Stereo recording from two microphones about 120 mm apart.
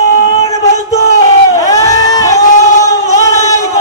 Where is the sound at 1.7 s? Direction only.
30° left (ahead or behind).